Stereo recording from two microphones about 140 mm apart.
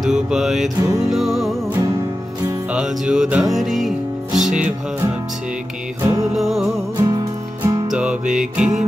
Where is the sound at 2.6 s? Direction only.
5° right (ahead or behind).